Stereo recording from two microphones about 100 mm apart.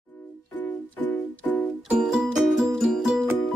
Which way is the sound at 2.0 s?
5° right (ahead or behind).